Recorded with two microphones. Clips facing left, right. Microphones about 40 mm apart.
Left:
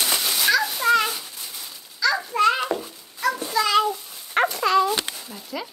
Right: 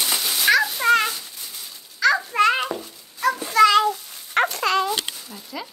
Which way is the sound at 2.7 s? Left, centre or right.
Centre.